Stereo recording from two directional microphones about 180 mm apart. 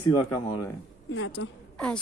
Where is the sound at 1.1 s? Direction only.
90° left.